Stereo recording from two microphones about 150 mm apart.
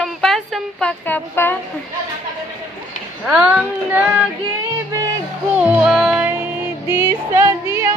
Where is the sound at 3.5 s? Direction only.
10° right (ahead or behind).